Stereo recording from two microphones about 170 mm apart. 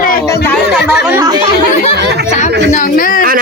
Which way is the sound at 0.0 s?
55° left (ahead or behind).